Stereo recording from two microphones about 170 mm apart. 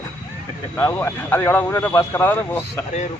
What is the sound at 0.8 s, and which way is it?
Speech, 15° left (ahead or behind).